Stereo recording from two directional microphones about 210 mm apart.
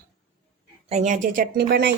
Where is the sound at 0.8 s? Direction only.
35° right (ahead or behind).